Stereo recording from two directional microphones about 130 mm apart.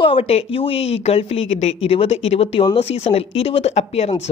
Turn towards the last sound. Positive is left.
turn(degrees=55)  # may be behind; listen again after turning